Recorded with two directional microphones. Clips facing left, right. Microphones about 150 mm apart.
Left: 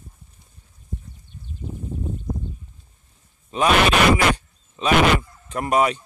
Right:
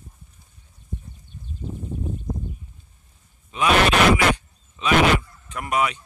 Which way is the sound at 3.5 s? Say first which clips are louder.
Left 1 dB; 35° left (ahead or behind).